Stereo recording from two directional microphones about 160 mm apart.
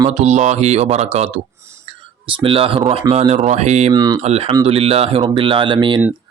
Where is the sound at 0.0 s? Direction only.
40° right (ahead or behind).